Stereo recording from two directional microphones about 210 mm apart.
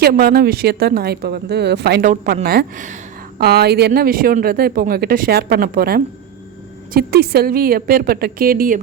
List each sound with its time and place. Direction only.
0.0 s a woman's voice: 45° right (ahead or behind)
3.4 s speech: 50° right (ahead or behind)